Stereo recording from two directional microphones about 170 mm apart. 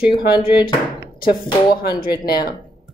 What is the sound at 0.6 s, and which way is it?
Chopping, 60° left (ahead or behind).